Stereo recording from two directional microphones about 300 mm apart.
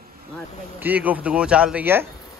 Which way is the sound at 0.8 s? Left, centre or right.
Centre.